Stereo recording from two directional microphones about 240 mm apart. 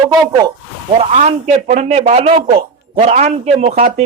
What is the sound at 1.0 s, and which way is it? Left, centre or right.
Speech, right.